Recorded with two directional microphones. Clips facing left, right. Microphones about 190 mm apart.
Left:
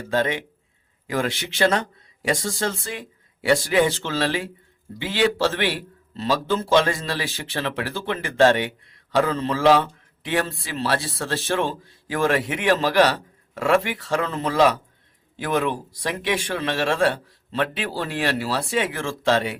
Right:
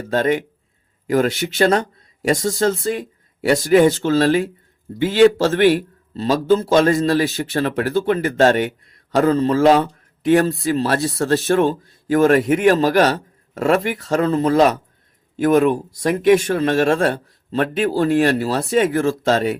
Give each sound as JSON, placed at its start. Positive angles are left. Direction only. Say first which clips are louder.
{"t": 0.1, "sound": "speech", "louder": "right 5 dB", "side_deg": -50}